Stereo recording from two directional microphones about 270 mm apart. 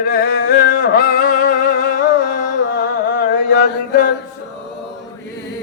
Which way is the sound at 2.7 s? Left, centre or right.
Left.